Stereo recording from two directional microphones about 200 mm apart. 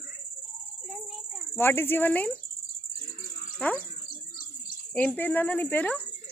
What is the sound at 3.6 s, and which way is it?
Speech, 5° left (ahead or behind).